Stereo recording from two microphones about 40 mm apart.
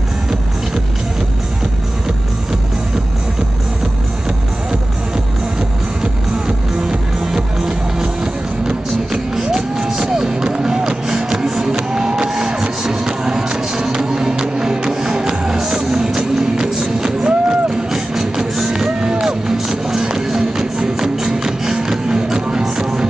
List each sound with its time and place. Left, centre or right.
6.4 s music: centre